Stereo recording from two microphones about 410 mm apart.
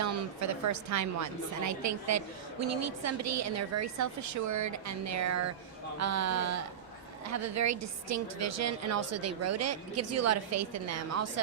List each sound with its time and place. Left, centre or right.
0.0 s a woman's voice: right